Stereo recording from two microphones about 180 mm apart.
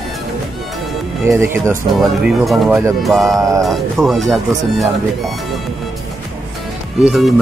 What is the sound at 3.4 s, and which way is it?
Speech, 20° right (ahead or behind).